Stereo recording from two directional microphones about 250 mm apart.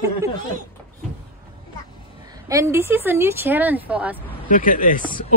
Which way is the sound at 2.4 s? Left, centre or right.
Centre.